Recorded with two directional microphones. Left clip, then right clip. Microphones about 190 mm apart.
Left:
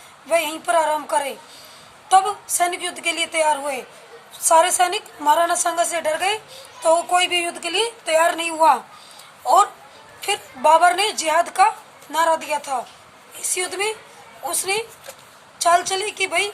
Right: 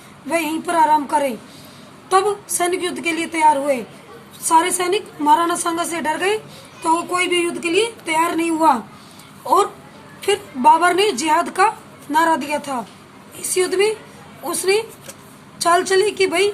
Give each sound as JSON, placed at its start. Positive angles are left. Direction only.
{"t": 0.3, "sound": "a woman's voice", "side_deg": 10}
{"t": 7.1, "sound": "a woman's voice", "side_deg": 15}
{"t": 10.2, "sound": "a woman's voice", "side_deg": 10}